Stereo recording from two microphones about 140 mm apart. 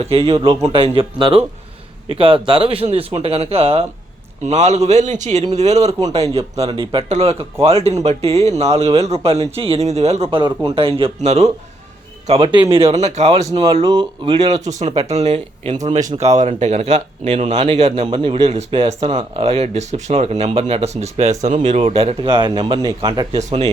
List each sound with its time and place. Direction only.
0.0 s speech: 45° right (ahead or behind)
6.7 s speech: 35° right (ahead or behind)
7.1 s speech: 50° right (ahead or behind)
10.4 s speech: 40° right (ahead or behind); by 11.5 s 55° right (ahead or behind)
12.3 s speech: 35° right (ahead or behind)
13.0 s speech: 55° right (ahead or behind)
13.5 s speech: 30° right (ahead or behind)
14.5 s speech: 55° right (ahead or behind)
15.9 s speech: 25° right (ahead or behind)
16.1 s speech: 55° right (ahead or behind)
18.0 s speech: 35° right (ahead or behind)
18.4 s speech: 45° right (ahead or behind)
23.4 s speech: 55° right (ahead or behind)